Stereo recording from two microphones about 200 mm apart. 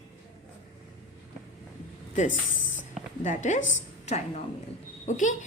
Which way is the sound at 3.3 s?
35° left (ahead or behind).